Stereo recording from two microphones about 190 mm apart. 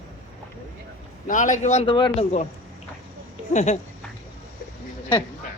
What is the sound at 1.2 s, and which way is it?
Speech, 40° left (ahead or behind).